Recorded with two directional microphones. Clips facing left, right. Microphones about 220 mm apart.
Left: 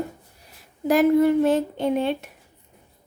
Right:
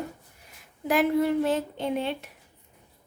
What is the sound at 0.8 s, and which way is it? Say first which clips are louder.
A woman's voice: left 6 dB; 45° left (ahead or behind).